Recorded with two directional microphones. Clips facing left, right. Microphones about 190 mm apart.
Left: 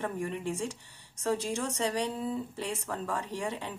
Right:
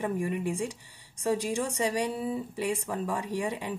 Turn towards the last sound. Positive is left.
turn(degrees=-10)  # may be behind; listen again after turning